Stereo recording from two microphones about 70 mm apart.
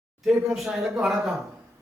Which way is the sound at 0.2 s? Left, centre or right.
Centre.